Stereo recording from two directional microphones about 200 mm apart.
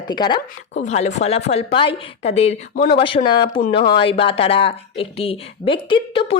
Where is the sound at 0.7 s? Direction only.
35° left (ahead or behind).